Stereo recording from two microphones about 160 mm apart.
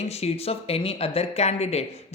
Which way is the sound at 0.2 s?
40° left (ahead or behind).